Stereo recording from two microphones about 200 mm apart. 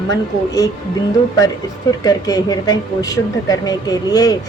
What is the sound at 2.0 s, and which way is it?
Speech, 20° left (ahead or behind).